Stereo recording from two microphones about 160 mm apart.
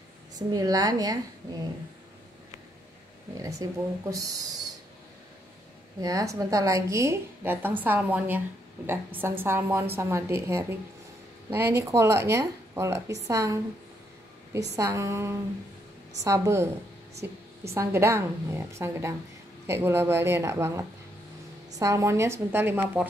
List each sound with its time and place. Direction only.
0.4 s a woman's voice: 25° right (ahead or behind)
3.6 s a woman's voice: 25° right (ahead or behind)
5.9 s a woman's voice: 20° right (ahead or behind)
14.8 s speech: 20° right (ahead or behind)
17.7 s speech: 15° right (ahead or behind)